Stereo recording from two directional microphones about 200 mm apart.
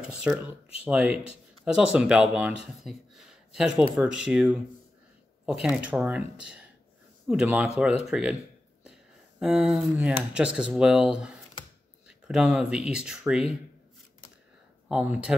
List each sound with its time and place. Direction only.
0.0 s speech: 5° right (ahead or behind)
1.1 s speech: 30° left (ahead or behind)
1.6 s speech: 5° right (ahead or behind)
9.4 s speech: 5° right (ahead or behind)
14.9 s speech: 5° right (ahead or behind)